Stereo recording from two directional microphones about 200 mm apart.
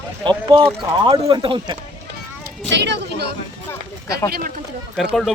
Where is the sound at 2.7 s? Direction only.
60° right (ahead or behind).